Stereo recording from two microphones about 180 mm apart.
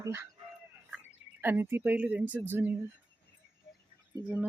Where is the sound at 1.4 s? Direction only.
10° right (ahead or behind).